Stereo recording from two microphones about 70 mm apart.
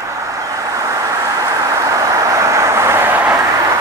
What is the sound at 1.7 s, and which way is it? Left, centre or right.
Vehicle, right.